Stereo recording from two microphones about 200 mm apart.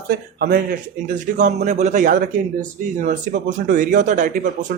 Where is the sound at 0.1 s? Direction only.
50° right (ahead or behind).